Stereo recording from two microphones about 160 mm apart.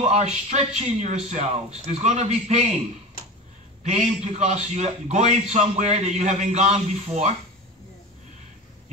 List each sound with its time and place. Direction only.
0.0 s a man's voice: 45° right (ahead or behind)
3.8 s a man's voice: 45° right (ahead or behind)